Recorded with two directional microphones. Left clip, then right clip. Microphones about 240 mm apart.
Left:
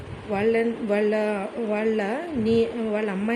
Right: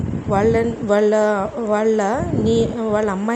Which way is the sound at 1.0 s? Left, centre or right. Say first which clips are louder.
Right 8 dB; centre.